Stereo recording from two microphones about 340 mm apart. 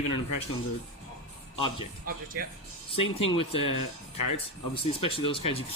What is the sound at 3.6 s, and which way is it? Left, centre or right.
Speech, left.